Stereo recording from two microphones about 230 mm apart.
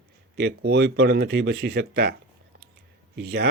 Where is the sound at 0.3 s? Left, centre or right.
Right.